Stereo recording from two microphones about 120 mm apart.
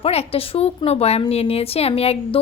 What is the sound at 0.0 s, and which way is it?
A woman's voice, 55° left (ahead or behind).